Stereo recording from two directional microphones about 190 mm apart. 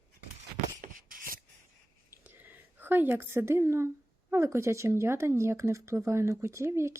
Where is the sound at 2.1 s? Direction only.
10° right (ahead or behind).